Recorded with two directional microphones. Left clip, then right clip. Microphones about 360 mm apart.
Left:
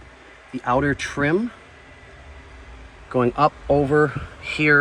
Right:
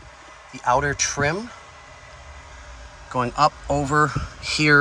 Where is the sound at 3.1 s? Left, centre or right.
Centre.